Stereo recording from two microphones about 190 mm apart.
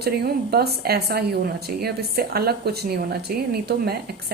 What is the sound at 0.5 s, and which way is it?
Music, 55° right (ahead or behind).